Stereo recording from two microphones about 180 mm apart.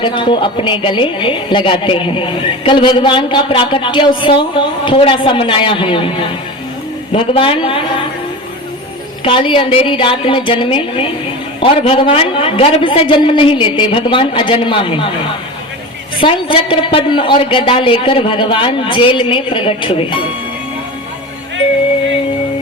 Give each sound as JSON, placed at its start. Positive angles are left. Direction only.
{"t": 0.0, "sound": "a woman's voice", "side_deg": 25}
{"t": 7.1, "sound": "a woman's voice", "side_deg": 30}
{"t": 9.2, "sound": "a woman's voice", "side_deg": 30}
{"t": 16.2, "sound": "a woman's voice", "side_deg": 30}